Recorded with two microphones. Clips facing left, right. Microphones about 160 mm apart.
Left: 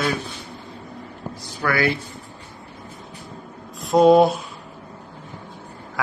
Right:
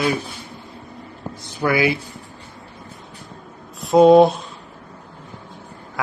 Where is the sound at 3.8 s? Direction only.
Centre (ahead or behind).